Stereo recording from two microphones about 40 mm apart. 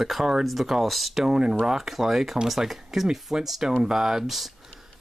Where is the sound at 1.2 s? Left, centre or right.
Centre.